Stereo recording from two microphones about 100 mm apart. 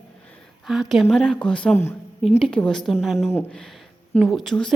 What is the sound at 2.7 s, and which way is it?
Speech, 5° left (ahead or behind).